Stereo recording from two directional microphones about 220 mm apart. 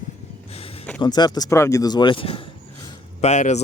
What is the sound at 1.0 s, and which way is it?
Speech, 20° left (ahead or behind).